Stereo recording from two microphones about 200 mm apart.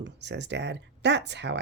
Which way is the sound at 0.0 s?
60° right (ahead or behind).